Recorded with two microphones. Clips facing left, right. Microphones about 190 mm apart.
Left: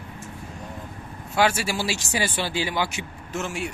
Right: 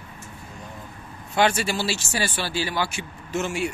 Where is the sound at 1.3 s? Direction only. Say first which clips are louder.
Right 1 dB; 5° left (ahead or behind).